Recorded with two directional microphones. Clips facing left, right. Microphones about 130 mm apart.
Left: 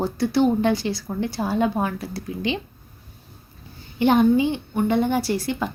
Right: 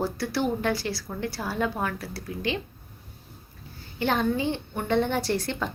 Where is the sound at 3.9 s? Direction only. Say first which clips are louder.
Left 8 dB; 15° left (ahead or behind).